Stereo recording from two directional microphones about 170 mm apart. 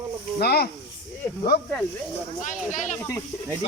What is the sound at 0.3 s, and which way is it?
Speech, 70° left (ahead or behind).